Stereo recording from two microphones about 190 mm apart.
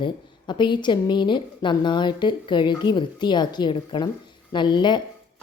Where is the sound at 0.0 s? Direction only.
25° left (ahead or behind).